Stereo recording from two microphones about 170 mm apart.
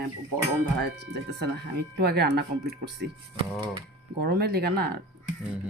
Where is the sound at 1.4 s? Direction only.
70° right (ahead or behind).